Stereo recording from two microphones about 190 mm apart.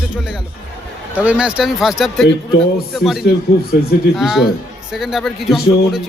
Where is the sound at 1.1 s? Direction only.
5° right (ahead or behind).